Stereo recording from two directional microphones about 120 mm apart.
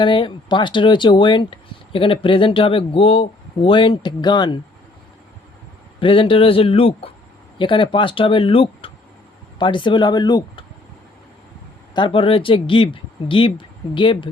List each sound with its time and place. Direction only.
0.0 s speech: 45° left (ahead or behind)
6.0 s speech: 45° left (ahead or behind)
11.9 s speech: 45° left (ahead or behind)